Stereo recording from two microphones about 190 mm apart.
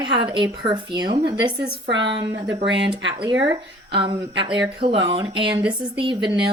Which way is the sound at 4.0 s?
25° right (ahead or behind).